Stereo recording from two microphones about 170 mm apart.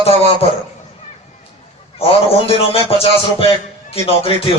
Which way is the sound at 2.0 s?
35° left (ahead or behind).